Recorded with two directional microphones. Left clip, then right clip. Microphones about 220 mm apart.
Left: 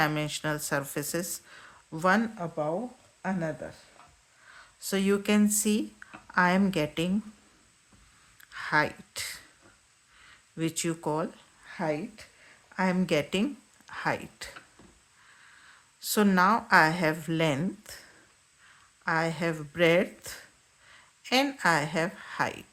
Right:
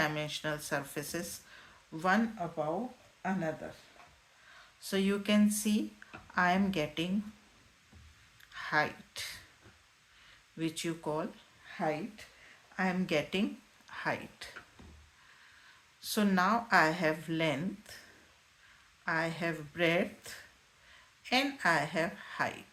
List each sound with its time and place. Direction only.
0.0 s speech: 45° left (ahead or behind)
4.8 s speech: 45° left (ahead or behind)
8.4 s a sound: 45° left (ahead or behind)
10.6 s speech: 45° left (ahead or behind)
16.0 s speech: 45° left (ahead or behind)
19.0 s speech: 45° left (ahead or behind)